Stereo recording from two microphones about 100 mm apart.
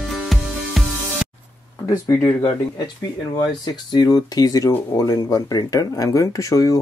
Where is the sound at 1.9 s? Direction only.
30° left (ahead or behind).